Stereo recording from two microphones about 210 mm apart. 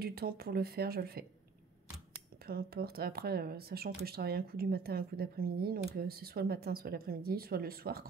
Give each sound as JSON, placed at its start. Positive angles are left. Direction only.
{"t": 0.0, "sound": "speech", "side_deg": -45}
{"t": 2.4, "sound": "speech", "side_deg": -45}